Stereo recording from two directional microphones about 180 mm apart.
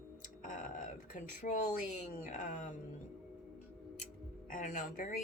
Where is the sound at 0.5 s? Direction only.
45° left (ahead or behind).